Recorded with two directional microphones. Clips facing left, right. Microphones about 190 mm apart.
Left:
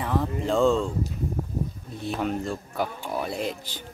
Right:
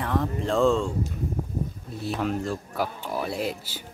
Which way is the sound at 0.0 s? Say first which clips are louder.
Even; centre (ahead or behind).